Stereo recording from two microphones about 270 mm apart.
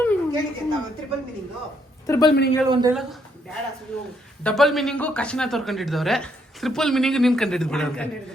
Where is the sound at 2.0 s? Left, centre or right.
Centre.